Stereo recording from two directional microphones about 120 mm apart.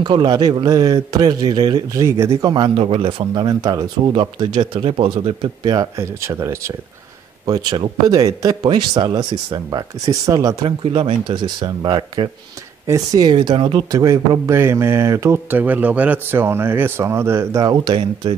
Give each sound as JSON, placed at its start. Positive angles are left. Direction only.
{"t": 0.0, "sound": "speech", "side_deg": -40}
{"t": 2.0, "sound": "speech", "side_deg": -20}
{"t": 2.5, "sound": "speech", "side_deg": -45}
{"t": 5.9, "sound": "speech", "side_deg": -20}
{"t": 8.6, "sound": "speech", "side_deg": -40}
{"t": 10.6, "sound": "speech", "side_deg": -45}
{"t": 13.9, "sound": "speech", "side_deg": -25}
{"t": 17.6, "sound": "speech", "side_deg": -40}